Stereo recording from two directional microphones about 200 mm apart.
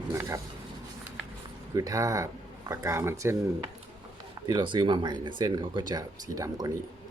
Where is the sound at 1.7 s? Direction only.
15° right (ahead or behind).